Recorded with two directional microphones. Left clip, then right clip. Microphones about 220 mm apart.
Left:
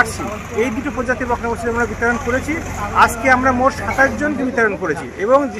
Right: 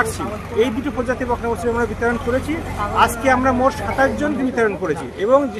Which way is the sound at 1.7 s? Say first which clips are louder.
Left 2 dB; 5° right (ahead or behind).